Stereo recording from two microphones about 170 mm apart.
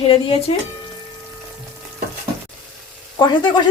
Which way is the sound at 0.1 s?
35° left (ahead or behind).